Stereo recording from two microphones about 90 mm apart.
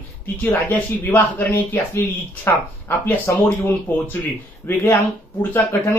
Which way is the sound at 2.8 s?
25° left (ahead or behind).